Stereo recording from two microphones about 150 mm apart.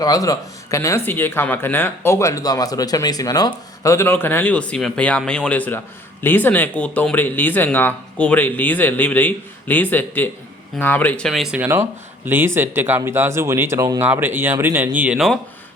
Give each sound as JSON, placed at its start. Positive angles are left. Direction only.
{"t": 0.0, "sound": "speech", "side_deg": 25}
{"t": 11.5, "sound": "speech", "side_deg": -10}